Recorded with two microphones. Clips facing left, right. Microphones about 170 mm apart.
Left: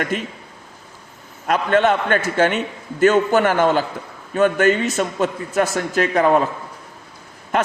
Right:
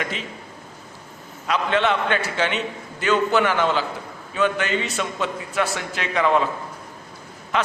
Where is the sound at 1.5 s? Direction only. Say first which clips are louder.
Left 5 dB; 45° left (ahead or behind).